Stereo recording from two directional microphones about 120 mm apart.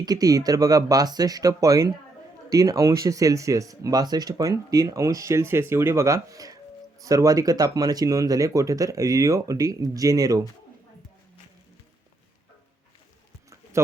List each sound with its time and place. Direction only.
0.0 s speech: 30° right (ahead or behind)